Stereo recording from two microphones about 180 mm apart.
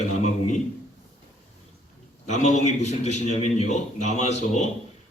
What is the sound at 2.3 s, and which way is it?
A man's voice, 40° left (ahead or behind).